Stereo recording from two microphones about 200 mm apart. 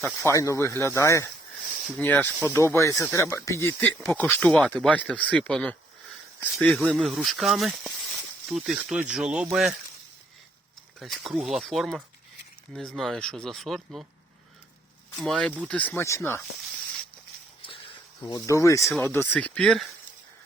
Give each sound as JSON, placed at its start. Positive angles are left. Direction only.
{"t": 0.0, "sound": "speech", "side_deg": 10}
{"t": 11.0, "sound": "speech", "side_deg": 0}
{"t": 15.2, "sound": "speech", "side_deg": 5}
{"t": 18.2, "sound": "speech", "side_deg": 15}